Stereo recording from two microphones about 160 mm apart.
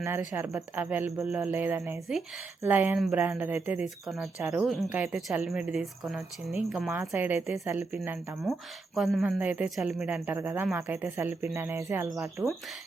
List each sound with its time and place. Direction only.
0.0 s speech: 15° right (ahead or behind)
4.2 s speech: 15° right (ahead or behind)
6.9 s speech: 15° right (ahead or behind)
9.0 s speech: centre (ahead or behind)
10.2 s speech: 15° right (ahead or behind)